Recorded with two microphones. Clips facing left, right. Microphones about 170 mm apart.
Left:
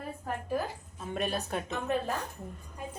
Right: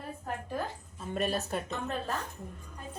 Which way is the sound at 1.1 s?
Centre (ahead or behind).